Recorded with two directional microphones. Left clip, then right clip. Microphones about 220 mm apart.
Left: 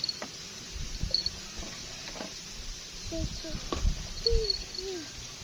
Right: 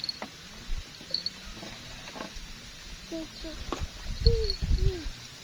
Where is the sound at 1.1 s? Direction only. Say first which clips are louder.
Left 2 dB; 35° right (ahead or behind).